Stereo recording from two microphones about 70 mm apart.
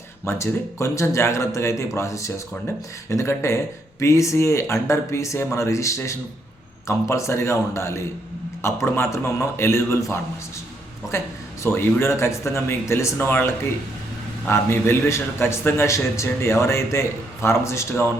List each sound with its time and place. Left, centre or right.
0.3 s a man's voice: left
11.1 s a man's voice: left
13.1 s speech: left
14.4 s a man's voice: left